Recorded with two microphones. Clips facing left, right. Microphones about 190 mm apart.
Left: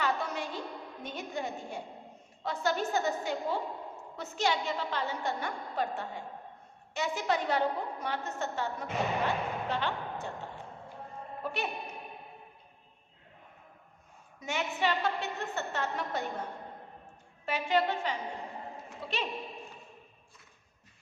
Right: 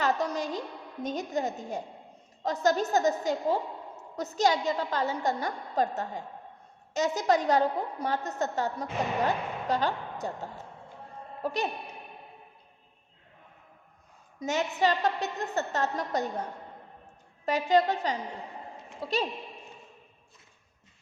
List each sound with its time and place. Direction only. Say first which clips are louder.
0.0 s a sound: right 4 dB; 40° right (ahead or behind)
1.0 s a woman's voice: right 7 dB; 40° right (ahead or behind)
11.4 s a woman's voice: right 5 dB; 40° right (ahead or behind)
14.4 s a woman's voice: right 5 dB; 40° right (ahead or behind)
17.4 s a woman's voice: right 5 dB; 40° right (ahead or behind)